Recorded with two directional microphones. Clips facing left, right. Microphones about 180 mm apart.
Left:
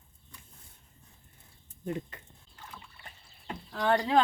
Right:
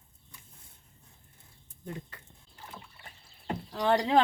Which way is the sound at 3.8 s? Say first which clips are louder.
Right 1 dB; 20° right (ahead or behind).